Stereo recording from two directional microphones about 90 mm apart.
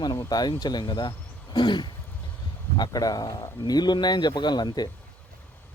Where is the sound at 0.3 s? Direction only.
50° left (ahead or behind).